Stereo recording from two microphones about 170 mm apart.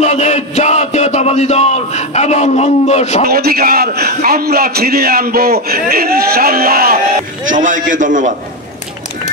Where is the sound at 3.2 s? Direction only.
65° right (ahead or behind).